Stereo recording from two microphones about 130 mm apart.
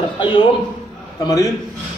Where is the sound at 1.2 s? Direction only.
25° left (ahead or behind).